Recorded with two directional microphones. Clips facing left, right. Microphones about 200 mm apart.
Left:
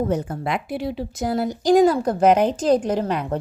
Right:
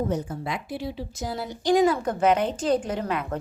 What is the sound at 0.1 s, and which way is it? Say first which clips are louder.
A woman's voice: left 5 dB; 65° left (ahead or behind).